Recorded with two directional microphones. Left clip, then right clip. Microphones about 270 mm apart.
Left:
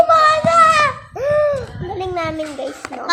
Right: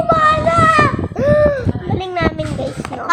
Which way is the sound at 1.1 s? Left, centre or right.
Centre.